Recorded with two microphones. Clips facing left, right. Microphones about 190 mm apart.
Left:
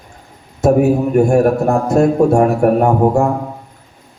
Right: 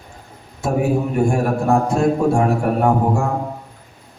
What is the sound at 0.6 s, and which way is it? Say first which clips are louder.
A man's voice: left 7 dB; 45° left (ahead or behind).